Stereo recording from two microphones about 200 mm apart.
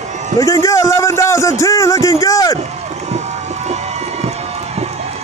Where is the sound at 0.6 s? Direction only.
15° left (ahead or behind).